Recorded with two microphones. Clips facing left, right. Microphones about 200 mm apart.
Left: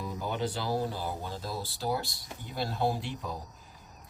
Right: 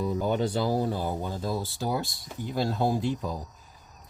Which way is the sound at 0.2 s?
45° right (ahead or behind).